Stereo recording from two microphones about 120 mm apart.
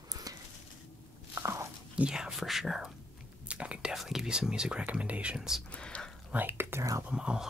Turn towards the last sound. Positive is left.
turn(degrees=-10)  # may be behind; listen again after turning